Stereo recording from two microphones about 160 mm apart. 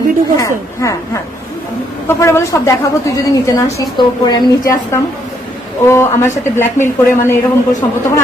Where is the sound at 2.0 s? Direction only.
15° left (ahead or behind).